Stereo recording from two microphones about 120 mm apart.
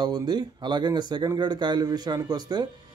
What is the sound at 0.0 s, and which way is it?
Speech, 35° right (ahead or behind).